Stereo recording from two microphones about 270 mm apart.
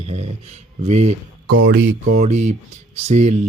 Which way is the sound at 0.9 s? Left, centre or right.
Right.